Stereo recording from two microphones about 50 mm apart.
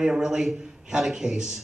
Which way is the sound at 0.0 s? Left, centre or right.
Centre.